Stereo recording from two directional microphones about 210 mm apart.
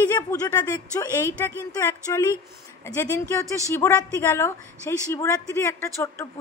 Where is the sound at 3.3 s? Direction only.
15° left (ahead or behind).